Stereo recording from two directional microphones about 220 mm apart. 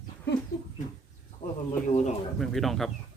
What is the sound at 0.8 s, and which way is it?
Bird, 35° left (ahead or behind).